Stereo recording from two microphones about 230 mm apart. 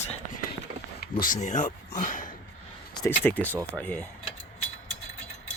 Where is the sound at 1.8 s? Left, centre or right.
Left.